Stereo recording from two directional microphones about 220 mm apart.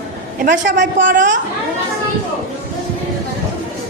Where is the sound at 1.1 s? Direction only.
35° right (ahead or behind).